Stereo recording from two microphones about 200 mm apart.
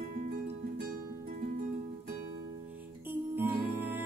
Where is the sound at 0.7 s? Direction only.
50° right (ahead or behind).